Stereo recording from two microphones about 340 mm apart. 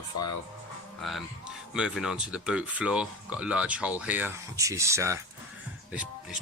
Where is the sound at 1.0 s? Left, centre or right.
Centre.